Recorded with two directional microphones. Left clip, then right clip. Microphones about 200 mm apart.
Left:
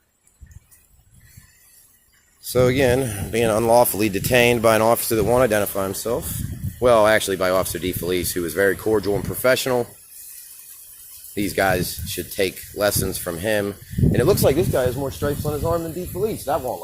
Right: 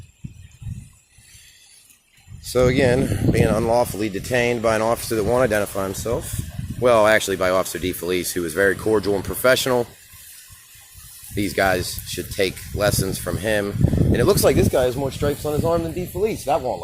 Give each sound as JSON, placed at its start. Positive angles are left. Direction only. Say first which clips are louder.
{"t": 2.4, "sound": "speech", "louder": "even", "side_deg": 0}
{"t": 11.3, "sound": "speech", "louder": "even", "side_deg": 0}